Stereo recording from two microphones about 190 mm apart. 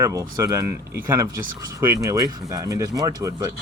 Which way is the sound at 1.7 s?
15° right (ahead or behind).